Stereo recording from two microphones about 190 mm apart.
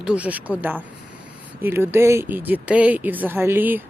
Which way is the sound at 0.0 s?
5° right (ahead or behind).